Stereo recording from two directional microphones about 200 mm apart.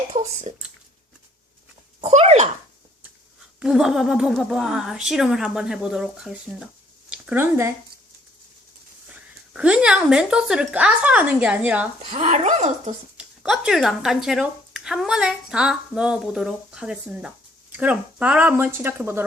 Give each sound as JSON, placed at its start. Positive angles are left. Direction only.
{"t": 0.1, "sound": "speech", "side_deg": -35}
{"t": 2.0, "sound": "speech", "side_deg": -30}
{"t": 3.6, "sound": "speech", "side_deg": 0}
{"t": 9.0, "sound": "speech", "side_deg": -5}
{"t": 12.1, "sound": "speech", "side_deg": -35}
{"t": 13.1, "sound": "speech", "side_deg": -5}